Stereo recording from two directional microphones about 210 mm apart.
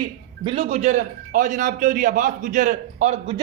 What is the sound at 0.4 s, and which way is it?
A man's voice, 25° right (ahead or behind).